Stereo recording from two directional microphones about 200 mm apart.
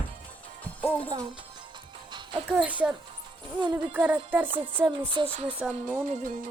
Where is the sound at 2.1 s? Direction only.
25° right (ahead or behind).